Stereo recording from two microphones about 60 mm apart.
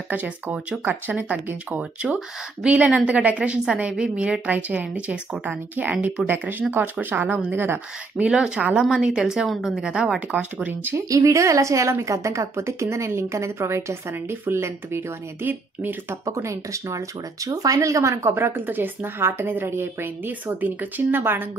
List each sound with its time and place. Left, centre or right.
0.1 s a woman's voice: right
8.3 s a woman's voice: centre
9.8 s a woman's voice: centre
10.3 s a woman's voice: right
11.1 s a woman's voice: right
14.3 s a woman's voice: right
16.3 s a woman's voice: right
18.3 s a woman's voice: right